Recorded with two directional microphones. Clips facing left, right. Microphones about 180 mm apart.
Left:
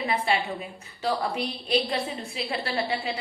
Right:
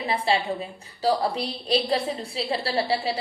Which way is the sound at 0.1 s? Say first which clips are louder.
Right 4 dB; 30° right (ahead or behind).